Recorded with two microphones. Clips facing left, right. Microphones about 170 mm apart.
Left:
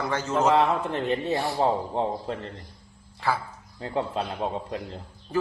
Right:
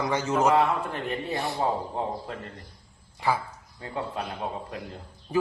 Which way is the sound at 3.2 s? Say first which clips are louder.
Right 1 dB; 15° right (ahead or behind).